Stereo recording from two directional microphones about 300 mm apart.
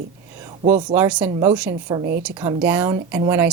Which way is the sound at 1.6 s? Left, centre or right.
Centre.